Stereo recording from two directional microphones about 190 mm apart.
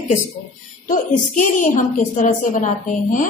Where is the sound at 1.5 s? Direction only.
45° left (ahead or behind).